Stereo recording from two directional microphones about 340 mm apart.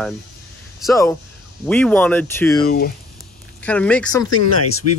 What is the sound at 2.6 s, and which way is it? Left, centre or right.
Speech, left.